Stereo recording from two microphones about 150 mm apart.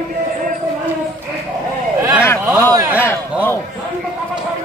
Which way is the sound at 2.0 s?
10° right (ahead or behind).